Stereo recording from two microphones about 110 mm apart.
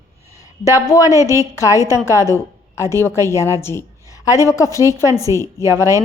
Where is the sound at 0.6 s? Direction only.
30° left (ahead or behind).